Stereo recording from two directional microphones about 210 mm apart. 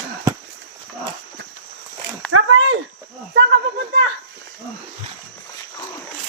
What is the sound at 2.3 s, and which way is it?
Dog, 80° right.